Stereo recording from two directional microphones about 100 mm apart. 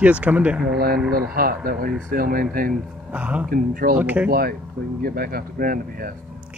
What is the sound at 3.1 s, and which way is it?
Speech, 15° right (ahead or behind).